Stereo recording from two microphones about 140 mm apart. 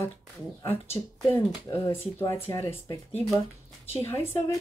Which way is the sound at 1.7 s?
25° left (ahead or behind).